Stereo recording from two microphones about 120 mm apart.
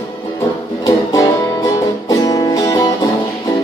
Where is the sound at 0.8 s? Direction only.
30° left (ahead or behind).